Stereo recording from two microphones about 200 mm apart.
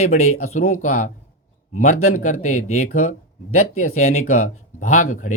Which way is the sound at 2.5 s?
90° left.